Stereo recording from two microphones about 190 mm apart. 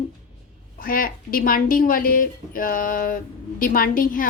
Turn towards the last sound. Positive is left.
turn(degrees=45)  # may be behind; listen again after turning